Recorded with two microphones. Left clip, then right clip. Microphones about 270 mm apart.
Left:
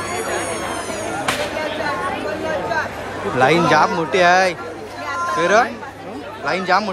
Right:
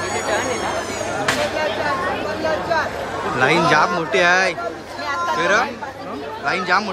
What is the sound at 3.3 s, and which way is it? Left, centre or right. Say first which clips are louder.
Speech: left 2 dB; centre.